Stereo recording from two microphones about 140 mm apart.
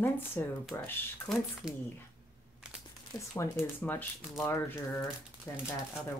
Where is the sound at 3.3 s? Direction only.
15° left (ahead or behind).